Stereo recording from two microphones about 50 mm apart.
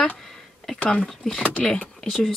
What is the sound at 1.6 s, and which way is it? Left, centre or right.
Speech, centre.